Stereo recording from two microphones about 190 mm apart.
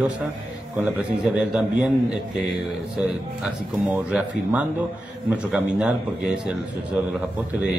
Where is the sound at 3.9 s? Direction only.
10° right (ahead or behind).